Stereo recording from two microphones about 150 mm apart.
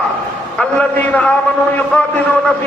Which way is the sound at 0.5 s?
10° left (ahead or behind).